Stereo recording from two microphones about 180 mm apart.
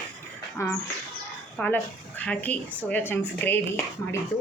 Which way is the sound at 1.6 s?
10° left (ahead or behind).